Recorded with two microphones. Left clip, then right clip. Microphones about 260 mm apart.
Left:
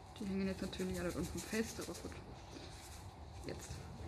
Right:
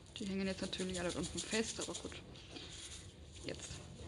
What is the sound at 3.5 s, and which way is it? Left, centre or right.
Speech, centre.